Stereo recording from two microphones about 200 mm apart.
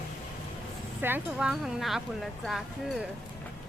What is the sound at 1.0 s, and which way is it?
Speech, 10° right (ahead or behind).